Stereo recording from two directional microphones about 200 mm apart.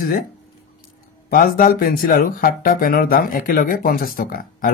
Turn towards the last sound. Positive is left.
turn(degrees=45)  # may be behind; listen again after turning